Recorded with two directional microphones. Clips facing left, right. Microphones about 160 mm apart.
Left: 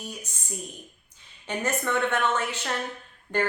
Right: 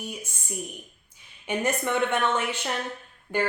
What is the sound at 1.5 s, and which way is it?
Speech, 15° right (ahead or behind).